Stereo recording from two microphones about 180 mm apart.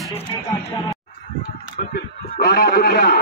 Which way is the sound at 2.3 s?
55° left (ahead or behind).